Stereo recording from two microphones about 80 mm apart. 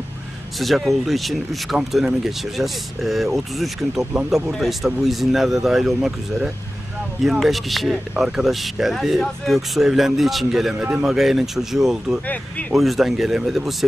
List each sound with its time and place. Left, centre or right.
0.6 s speech: centre
10.8 s a man's voice: centre
11.1 s speech: centre